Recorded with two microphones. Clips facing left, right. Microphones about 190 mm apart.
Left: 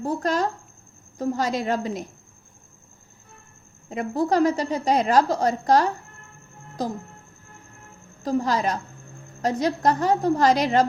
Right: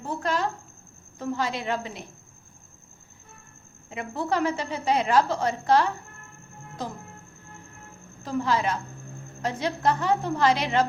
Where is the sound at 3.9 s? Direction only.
40° left (ahead or behind).